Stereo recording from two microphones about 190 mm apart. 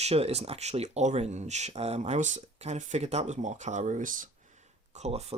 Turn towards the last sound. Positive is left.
turn(degrees=-35)  # may be behind; listen again after turning